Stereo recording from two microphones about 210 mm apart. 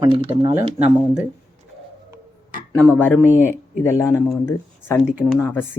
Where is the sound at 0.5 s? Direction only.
5° right (ahead or behind).